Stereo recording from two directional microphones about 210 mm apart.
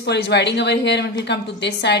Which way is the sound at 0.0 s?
55° left (ahead or behind).